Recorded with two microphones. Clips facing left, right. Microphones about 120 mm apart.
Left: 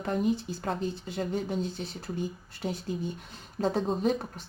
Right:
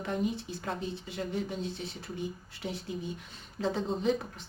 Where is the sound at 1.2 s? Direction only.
45° left (ahead or behind).